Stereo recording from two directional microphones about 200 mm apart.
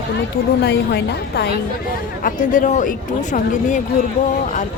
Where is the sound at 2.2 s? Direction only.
40° left (ahead or behind).